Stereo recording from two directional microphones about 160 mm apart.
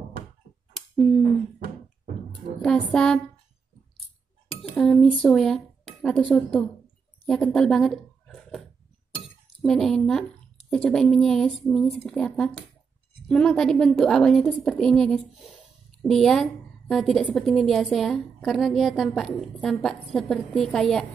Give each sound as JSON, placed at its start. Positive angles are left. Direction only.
{"t": 0.7, "sound": "a sound", "side_deg": 5}
{"t": 2.6, "sound": "a woman's voice", "side_deg": 5}
{"t": 4.6, "sound": "dishes", "side_deg": 0}
{"t": 5.1, "sound": "speech", "side_deg": 0}
{"t": 7.2, "sound": "a sound", "side_deg": 5}
{"t": 9.6, "sound": "a woman's voice", "side_deg": 0}